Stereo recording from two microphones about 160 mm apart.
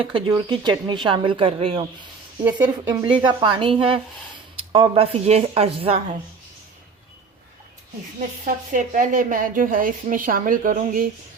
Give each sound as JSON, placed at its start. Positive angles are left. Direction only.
{"t": 0.0, "sound": "speech", "side_deg": -30}
{"t": 8.4, "sound": "a woman's voice", "side_deg": -55}